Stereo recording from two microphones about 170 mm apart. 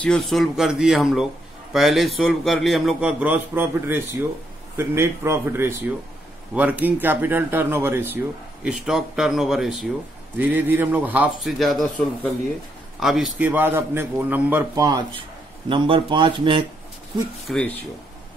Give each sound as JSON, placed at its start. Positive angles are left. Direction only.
{"t": 0.0, "sound": "a man's voice", "side_deg": 5}
{"t": 14.8, "sound": "speech", "side_deg": -25}
{"t": 17.5, "sound": "speech", "side_deg": 5}